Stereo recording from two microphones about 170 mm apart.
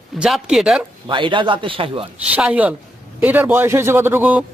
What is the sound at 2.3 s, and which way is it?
A man's voice, 10° right (ahead or behind).